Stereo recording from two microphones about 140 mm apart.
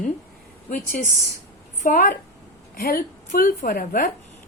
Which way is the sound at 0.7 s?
70° left (ahead or behind).